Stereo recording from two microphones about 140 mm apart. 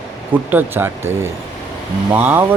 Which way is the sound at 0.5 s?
15° right (ahead or behind).